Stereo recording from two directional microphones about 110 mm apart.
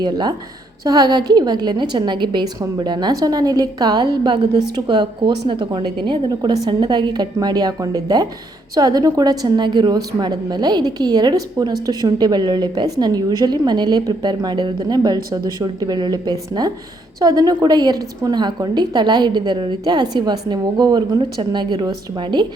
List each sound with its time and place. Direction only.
0.0 s a woman's voice: 40° right (ahead or behind)